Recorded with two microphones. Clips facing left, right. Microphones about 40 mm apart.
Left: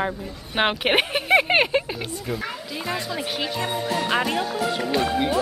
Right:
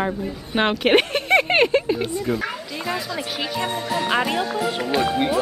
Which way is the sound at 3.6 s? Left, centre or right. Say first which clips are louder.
Right 2 dB; centre.